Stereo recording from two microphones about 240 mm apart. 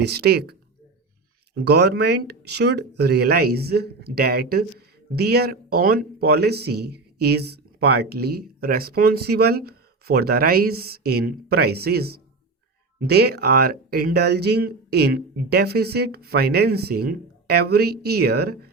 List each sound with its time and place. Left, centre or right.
0.0 s speech: right
1.6 s speech: right